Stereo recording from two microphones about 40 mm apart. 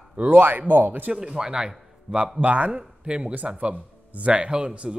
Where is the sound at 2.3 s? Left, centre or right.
Right.